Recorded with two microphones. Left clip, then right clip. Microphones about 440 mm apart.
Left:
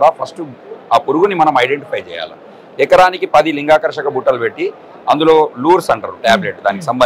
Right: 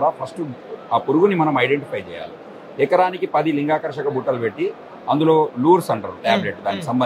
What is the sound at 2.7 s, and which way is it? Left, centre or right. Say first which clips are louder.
Speech: left 8 dB; left.